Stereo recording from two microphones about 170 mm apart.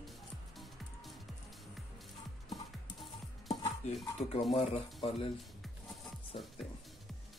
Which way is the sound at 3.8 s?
45° left (ahead or behind).